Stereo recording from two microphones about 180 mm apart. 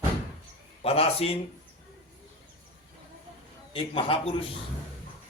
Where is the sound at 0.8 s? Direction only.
35° left (ahead or behind).